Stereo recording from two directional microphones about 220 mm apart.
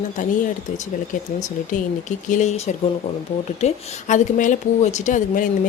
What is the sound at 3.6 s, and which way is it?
Speech, 35° left (ahead or behind).